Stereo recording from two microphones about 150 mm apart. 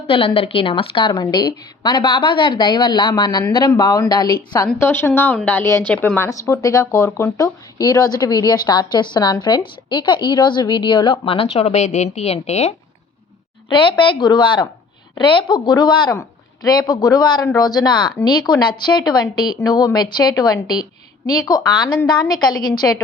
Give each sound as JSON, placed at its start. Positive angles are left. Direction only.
{"t": 0.1, "sound": "a woman's voice", "side_deg": 40}
{"t": 13.7, "sound": "a woman's voice", "side_deg": 35}